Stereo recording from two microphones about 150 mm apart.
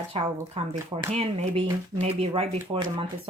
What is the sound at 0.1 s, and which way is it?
Speech, 40° right (ahead or behind).